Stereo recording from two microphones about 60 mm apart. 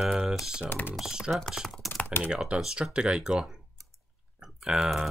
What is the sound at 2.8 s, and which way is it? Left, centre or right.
Speech, centre.